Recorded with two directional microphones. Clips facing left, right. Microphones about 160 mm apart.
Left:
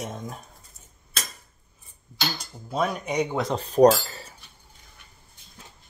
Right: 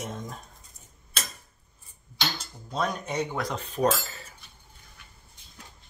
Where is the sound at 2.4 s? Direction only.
5° left (ahead or behind); by 4.0 s 35° left (ahead or behind).